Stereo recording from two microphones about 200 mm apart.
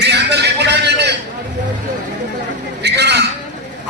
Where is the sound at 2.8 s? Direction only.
55° right (ahead or behind).